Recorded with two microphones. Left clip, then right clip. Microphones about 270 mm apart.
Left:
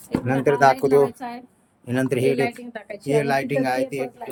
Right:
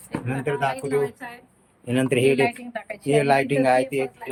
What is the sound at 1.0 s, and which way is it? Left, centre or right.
Speech, left.